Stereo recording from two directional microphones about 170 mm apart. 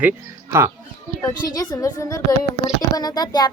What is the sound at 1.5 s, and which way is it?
Speech, 20° left (ahead or behind).